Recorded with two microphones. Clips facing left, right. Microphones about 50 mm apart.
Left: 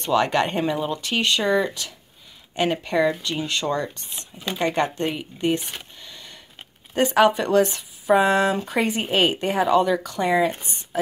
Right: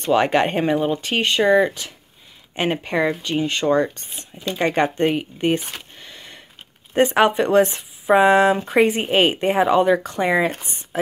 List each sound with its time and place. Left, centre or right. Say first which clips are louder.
0.1 s speech: right 3 dB; right
6.0 s a sound: right 2 dB; right
6.9 s speech: right 1 dB; right